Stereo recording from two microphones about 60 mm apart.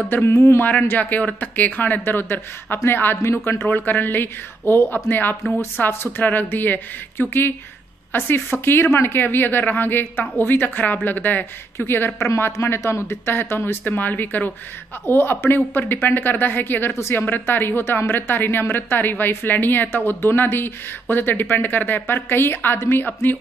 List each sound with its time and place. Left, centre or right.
0.2 s a woman's voice: left
0.7 s a woman's voice: left
3.7 s a woman's voice: left